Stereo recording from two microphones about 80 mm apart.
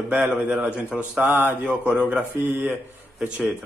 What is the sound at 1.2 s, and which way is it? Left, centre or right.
Speech, right.